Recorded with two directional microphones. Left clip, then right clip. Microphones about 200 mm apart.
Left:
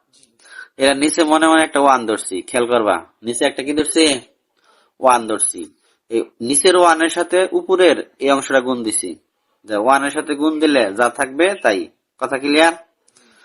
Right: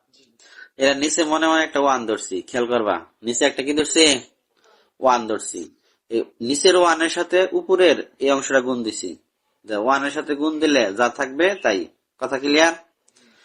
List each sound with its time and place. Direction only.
0.3 s speech: 30° left (ahead or behind); by 4.2 s 15° left (ahead or behind)
4.9 s speech: 25° left (ahead or behind)